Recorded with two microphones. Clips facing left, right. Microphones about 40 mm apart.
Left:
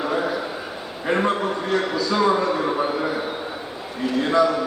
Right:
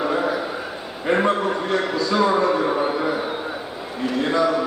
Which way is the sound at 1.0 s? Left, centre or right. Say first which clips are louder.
Right 2 dB; centre.